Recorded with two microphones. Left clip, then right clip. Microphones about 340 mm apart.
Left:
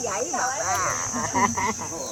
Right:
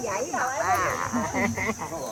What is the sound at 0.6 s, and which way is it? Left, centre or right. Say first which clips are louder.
Speech: right 1 dB; centre.